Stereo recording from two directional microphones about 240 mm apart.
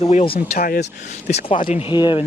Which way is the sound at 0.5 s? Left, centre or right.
Left.